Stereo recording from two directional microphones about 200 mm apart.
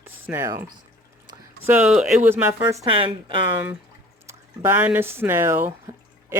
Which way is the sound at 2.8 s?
25° right (ahead or behind).